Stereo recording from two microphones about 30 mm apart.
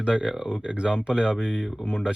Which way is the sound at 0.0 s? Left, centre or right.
Right.